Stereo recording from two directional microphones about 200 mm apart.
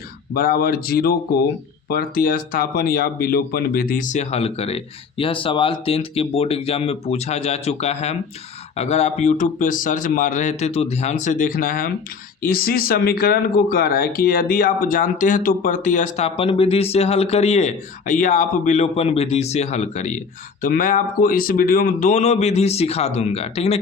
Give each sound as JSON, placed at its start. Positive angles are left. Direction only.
{"t": 0.3, "sound": "speech", "side_deg": 50}